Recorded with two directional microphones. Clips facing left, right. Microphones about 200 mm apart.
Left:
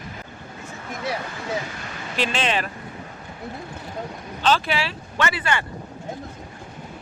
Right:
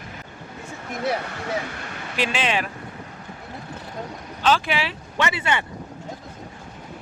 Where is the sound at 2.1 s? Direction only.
10° right (ahead or behind).